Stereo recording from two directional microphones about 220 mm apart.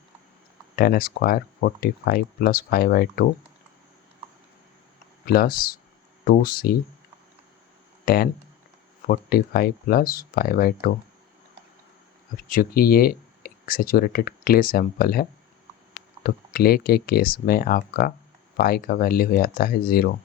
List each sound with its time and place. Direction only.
0.8 s speech: 40° left (ahead or behind)
5.2 s speech: 45° left (ahead or behind)
8.0 s speech: 45° left (ahead or behind)
12.5 s speech: 40° left (ahead or behind)